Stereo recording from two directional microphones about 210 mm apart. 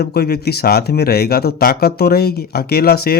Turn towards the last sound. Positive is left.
turn(degrees=45)  # may be behind; listen again after turning